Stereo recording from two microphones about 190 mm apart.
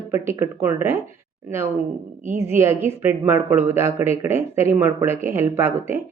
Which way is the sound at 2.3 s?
15° right (ahead or behind).